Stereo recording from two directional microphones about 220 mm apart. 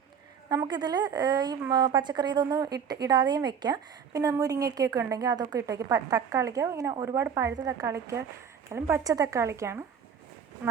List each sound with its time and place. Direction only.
0.4 s a woman's voice: 20° right (ahead or behind)